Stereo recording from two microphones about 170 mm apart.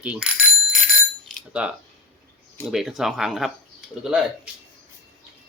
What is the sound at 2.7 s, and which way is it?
Speech, centre (ahead or behind).